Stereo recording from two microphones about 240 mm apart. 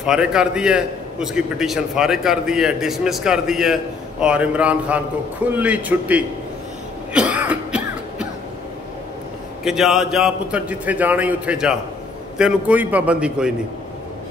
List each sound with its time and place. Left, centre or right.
0.0 s a man's voice: centre
7.2 s throat clearing: centre
9.7 s a man's voice: centre